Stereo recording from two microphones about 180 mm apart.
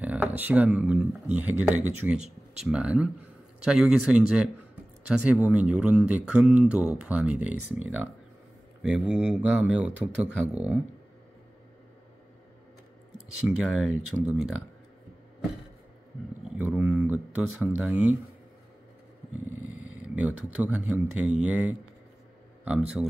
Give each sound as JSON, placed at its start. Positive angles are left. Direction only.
{"t": 0.0, "sound": "speech", "side_deg": -10}
{"t": 2.1, "sound": "speech", "side_deg": -40}
{"t": 2.6, "sound": "speech", "side_deg": -5}
{"t": 8.8, "sound": "speech", "side_deg": -5}
{"t": 13.4, "sound": "speech", "side_deg": -5}
{"t": 16.5, "sound": "speech", "side_deg": -10}
{"t": 19.8, "sound": "purr", "side_deg": -5}
{"t": 20.5, "sound": "speech", "side_deg": -5}